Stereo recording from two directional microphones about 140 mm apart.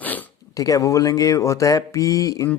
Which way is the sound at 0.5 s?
25° left (ahead or behind).